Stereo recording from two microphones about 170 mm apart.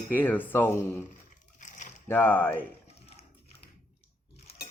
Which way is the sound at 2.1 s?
10° left (ahead or behind).